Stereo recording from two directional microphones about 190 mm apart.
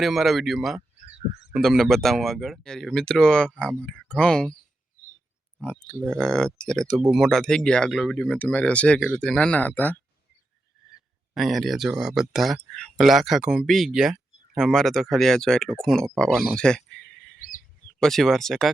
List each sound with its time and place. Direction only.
0.0 s speech: centre (ahead or behind)
1.0 s frog: 35° right (ahead or behind)
1.5 s speech: centre (ahead or behind)
5.6 s speech: 5° left (ahead or behind)
11.3 s speech: centre (ahead or behind)
16.6 s a sound: 5° left (ahead or behind)
18.0 s speech: centre (ahead or behind)